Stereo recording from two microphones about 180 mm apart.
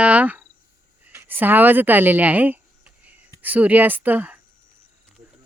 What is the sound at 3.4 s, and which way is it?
Speech, 10° right (ahead or behind).